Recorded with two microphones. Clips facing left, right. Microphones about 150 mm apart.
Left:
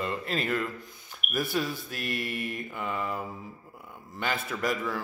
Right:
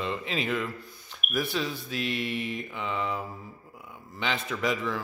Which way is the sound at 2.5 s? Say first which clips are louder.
Right 1 dB; 5° left (ahead or behind).